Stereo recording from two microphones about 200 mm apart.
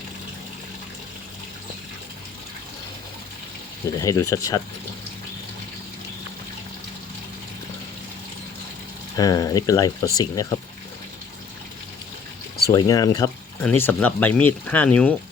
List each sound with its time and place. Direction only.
3.8 s speech: 15° left (ahead or behind)
9.1 s speech: 20° left (ahead or behind)
12.7 s speech: 20° left (ahead or behind)